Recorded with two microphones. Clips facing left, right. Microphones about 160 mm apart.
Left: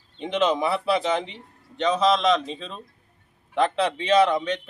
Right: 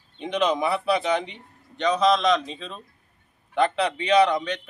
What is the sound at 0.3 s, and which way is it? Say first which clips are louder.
A man's voice: left 1 dB; centre (ahead or behind).